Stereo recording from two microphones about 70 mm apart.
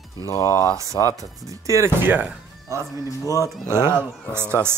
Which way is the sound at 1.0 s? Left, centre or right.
Left.